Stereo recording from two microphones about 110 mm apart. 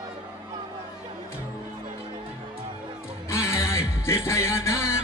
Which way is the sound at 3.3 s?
25° left (ahead or behind).